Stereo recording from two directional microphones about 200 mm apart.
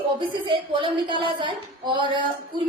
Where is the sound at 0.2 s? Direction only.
25° right (ahead or behind).